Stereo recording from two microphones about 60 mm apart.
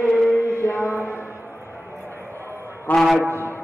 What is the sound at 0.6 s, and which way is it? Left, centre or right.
Music, left.